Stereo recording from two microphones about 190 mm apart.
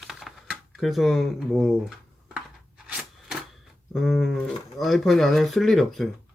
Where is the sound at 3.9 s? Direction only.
Centre (ahead or behind).